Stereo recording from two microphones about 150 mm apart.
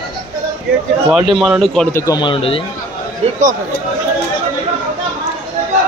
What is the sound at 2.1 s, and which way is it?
Speech, 35° left (ahead or behind).